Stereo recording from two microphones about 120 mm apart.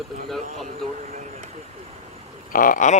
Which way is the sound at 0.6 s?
75° right (ahead or behind).